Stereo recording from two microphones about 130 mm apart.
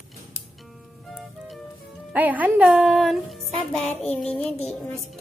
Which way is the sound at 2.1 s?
10° right (ahead or behind).